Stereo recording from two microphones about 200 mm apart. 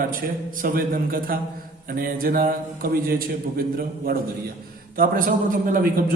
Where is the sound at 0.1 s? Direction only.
45° right (ahead or behind).